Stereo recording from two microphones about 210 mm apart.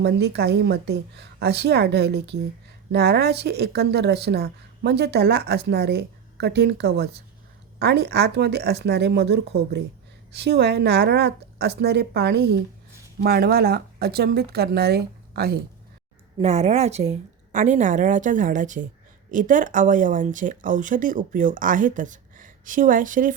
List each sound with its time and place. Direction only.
0.0 s speech: 50° right (ahead or behind)
16.4 s speech: 30° right (ahead or behind)